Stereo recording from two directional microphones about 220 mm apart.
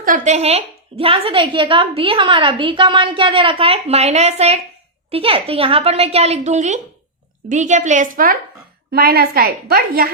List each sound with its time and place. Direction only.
0.0 s a woman's voice: 35° right (ahead or behind)